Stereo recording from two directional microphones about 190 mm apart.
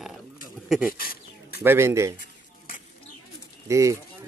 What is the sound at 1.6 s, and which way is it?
Speech, 15° right (ahead or behind).